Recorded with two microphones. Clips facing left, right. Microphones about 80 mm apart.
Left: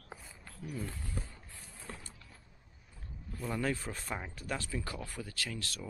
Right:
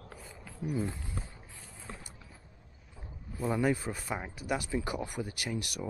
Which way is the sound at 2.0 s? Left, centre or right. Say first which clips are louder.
Right 3 dB; centre.